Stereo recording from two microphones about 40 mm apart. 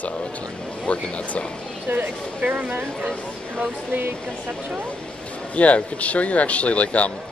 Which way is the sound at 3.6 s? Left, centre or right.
Right.